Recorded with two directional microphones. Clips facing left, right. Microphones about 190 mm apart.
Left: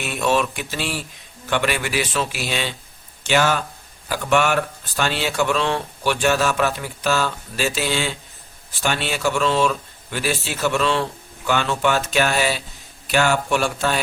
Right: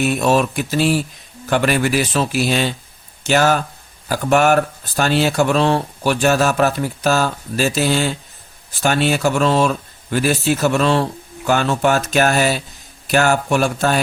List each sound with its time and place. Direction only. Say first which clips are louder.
0.0 s speech: right 5 dB; 40° right (ahead or behind)